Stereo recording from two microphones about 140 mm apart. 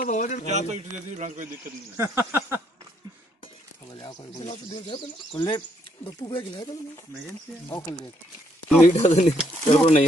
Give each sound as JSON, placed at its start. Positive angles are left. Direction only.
{"t": 0.0, "sound": "a man's voice", "side_deg": 65}
{"t": 0.5, "sound": "a man's voice", "side_deg": -55}
{"t": 2.0, "sound": "a sound", "side_deg": -20}
{"t": 3.9, "sound": "a sound", "side_deg": 35}
{"t": 4.7, "sound": "speech", "side_deg": 35}
{"t": 7.7, "sound": "speech", "side_deg": 30}
{"t": 8.8, "sound": "speech", "side_deg": 55}